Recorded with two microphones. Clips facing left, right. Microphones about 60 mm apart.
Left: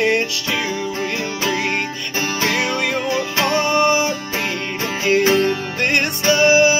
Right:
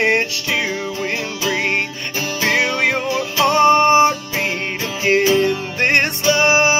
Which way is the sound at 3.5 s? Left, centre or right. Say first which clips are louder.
Right 5 dB; right.